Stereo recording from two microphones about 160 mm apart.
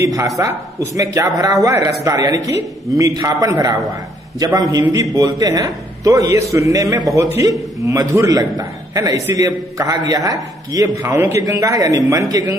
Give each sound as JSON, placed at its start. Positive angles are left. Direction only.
{"t": 0.0, "sound": "a man's voice", "side_deg": -20}